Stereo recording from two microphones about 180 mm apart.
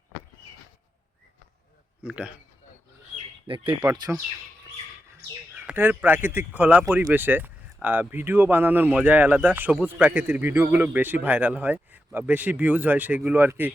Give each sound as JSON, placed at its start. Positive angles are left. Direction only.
{"t": 2.0, "sound": "speech", "side_deg": -5}
{"t": 3.4, "sound": "speech", "side_deg": -30}
{"t": 4.1, "sound": "speech", "side_deg": 0}
{"t": 5.5, "sound": "speech", "side_deg": -10}